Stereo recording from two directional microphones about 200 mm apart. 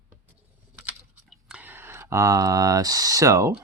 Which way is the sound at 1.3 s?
5° right (ahead or behind).